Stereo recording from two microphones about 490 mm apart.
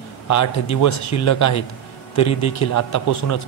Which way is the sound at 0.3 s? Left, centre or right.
Left.